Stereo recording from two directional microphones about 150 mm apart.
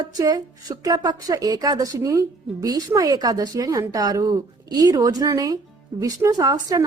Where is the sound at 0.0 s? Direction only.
25° right (ahead or behind).